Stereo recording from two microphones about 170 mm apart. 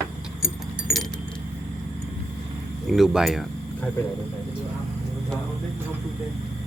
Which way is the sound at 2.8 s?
Centre (ahead or behind).